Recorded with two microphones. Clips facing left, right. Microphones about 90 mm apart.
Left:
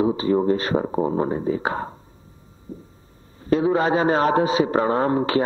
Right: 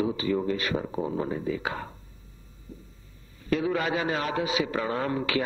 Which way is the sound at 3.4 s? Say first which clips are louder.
Left 7 dB; 30° left (ahead or behind).